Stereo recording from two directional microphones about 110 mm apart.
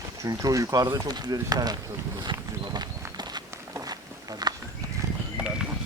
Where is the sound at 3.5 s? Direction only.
30° right (ahead or behind).